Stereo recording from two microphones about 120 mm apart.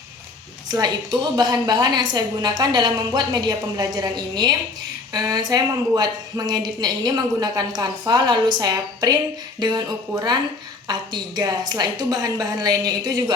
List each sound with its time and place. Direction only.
0.7 s a woman's voice: 35° right (ahead or behind)